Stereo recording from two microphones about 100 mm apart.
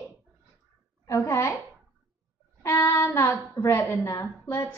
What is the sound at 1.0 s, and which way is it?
Speech, 30° left (ahead or behind).